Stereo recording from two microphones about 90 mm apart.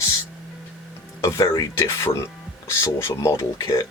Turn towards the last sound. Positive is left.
turn(degrees=35)  # may be behind; listen again after turning